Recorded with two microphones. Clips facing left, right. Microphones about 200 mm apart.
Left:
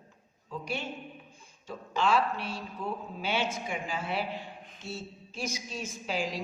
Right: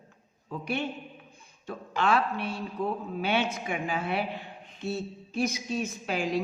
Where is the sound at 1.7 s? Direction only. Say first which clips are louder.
Right 1 dB; 60° right (ahead or behind).